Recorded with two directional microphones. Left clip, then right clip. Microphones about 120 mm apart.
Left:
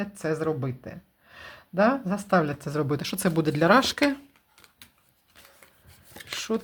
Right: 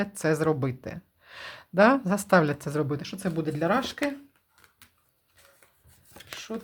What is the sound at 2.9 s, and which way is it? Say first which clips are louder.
Speech: left 5 dB; 30° left (ahead or behind).